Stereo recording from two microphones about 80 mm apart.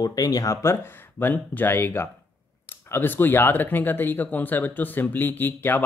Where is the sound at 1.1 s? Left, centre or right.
Left.